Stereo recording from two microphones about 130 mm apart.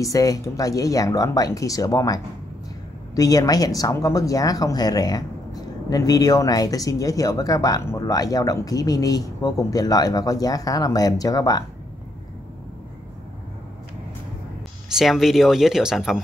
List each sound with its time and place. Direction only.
0.0 s speech: 25° left (ahead or behind)
14.9 s speech: centre (ahead or behind)